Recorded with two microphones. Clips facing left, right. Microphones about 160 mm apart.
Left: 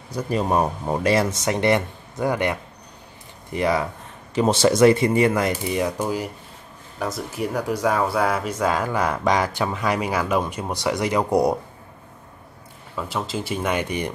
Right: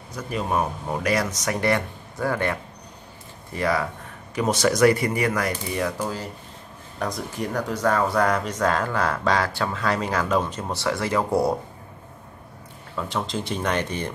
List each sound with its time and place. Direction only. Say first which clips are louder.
0.1 s speech: left 4 dB; 35° left (ahead or behind); by 6.2 s 15° left (ahead or behind)
7.0 s speech: left 2 dB; 5° left (ahead or behind)
12.9 s speech: even; 5° left (ahead or behind)